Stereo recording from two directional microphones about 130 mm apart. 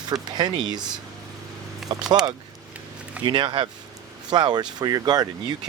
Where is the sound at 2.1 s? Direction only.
30° right (ahead or behind).